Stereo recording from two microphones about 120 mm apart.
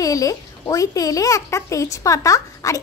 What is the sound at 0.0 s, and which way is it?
A child's voice, 30° left (ahead or behind).